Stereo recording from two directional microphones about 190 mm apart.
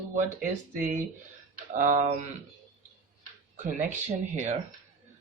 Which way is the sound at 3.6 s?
45° right (ahead or behind).